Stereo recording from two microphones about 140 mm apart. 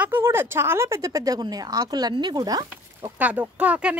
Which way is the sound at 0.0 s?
15° right (ahead or behind).